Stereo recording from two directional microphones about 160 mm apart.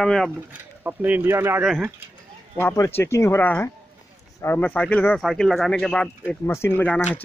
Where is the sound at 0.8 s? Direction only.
10° right (ahead or behind).